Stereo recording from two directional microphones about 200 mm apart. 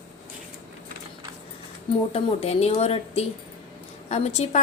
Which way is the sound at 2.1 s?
30° left (ahead or behind).